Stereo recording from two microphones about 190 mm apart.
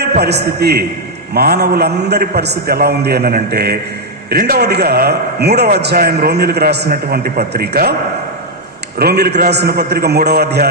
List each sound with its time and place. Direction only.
0.0 s a man's voice: 60° right (ahead or behind)
9.0 s a man's voice: 55° right (ahead or behind)